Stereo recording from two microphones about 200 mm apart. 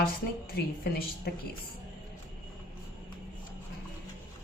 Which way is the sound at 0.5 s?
50° left (ahead or behind).